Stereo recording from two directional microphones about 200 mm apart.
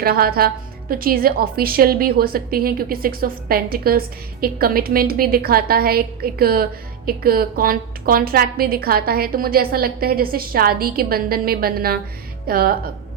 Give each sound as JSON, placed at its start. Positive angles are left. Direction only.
{"t": 0.0, "sound": "a woman's voice", "side_deg": -50}